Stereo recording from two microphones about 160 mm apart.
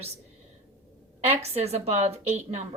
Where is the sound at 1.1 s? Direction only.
40° right (ahead or behind).